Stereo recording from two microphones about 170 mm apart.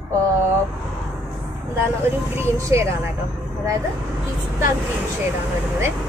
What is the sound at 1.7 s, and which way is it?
Speech, 15° right (ahead or behind).